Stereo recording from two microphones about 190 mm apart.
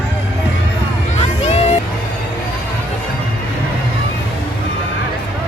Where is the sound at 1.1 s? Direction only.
35° left (ahead or behind).